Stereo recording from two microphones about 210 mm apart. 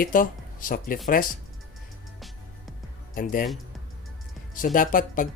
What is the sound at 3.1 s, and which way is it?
Speech, 40° left (ahead or behind).